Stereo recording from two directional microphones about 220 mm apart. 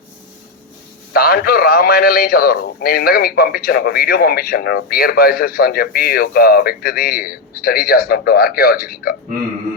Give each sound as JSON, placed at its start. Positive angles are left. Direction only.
{"t": 1.1, "sound": "a man's voice", "side_deg": 45}